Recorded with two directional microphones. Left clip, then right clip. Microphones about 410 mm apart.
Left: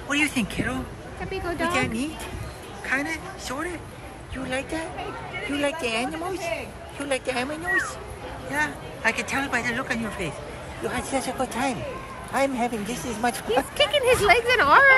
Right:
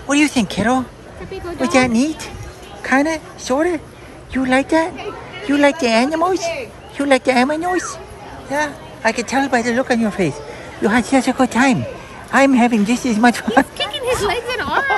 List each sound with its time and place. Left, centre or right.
0.1 s a woman's voice: centre
13.7 s speech: centre